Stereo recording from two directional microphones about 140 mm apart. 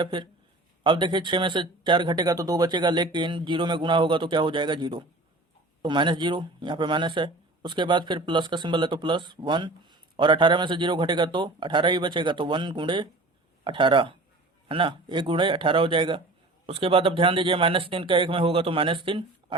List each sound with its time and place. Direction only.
0.0 s speech: 35° right (ahead or behind)